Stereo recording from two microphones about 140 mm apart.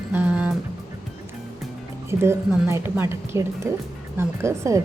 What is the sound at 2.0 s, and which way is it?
Speech, 20° right (ahead or behind).